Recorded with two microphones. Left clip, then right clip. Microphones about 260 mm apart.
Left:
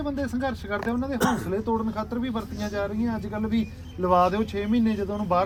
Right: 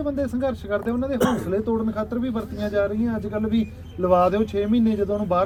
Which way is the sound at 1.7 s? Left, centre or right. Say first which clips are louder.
Right 2 dB; centre.